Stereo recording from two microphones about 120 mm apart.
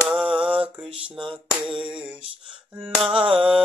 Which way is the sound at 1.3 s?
45° right (ahead or behind).